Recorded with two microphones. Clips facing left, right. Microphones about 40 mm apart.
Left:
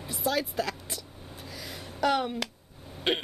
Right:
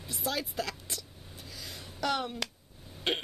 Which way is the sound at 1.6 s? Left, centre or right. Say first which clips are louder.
Left 6 dB; centre.